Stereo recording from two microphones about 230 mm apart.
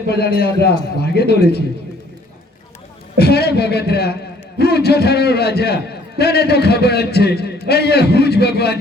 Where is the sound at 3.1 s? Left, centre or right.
Left.